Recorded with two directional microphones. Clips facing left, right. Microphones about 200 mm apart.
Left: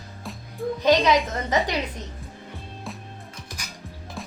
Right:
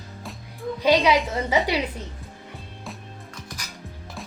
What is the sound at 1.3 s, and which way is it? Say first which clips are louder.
Speech: right 2 dB; 10° right (ahead or behind).